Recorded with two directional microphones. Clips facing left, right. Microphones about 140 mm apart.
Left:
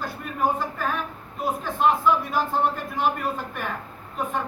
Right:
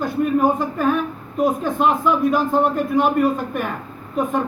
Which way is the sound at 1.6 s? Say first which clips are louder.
Right 3 dB; 15° right (ahead or behind).